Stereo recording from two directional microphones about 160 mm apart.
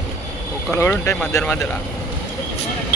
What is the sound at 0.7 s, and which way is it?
Speech, 15° left (ahead or behind).